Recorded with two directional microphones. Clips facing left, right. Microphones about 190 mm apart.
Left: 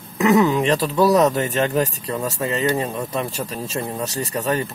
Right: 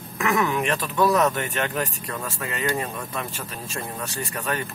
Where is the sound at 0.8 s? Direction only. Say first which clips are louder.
Left 5 dB; 35° left (ahead or behind).